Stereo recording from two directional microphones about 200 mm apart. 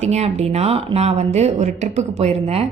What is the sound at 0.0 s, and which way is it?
A woman's voice, 35° right (ahead or behind).